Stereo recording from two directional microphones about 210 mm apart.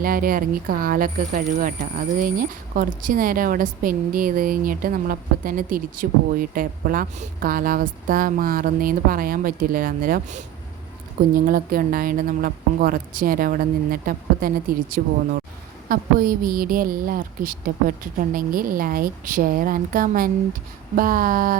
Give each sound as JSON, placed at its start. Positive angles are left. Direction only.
{"t": 0.0, "sound": "a woman's voice", "side_deg": -40}
{"t": 11.4, "sound": "a woman's voice", "side_deg": -45}